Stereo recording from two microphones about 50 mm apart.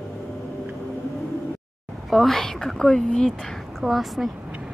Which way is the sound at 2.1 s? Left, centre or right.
Centre.